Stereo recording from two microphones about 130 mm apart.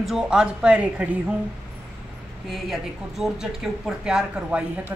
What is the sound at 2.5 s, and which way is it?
Speech, centre (ahead or behind).